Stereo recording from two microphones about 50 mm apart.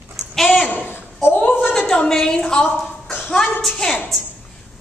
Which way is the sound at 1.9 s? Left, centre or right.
Centre.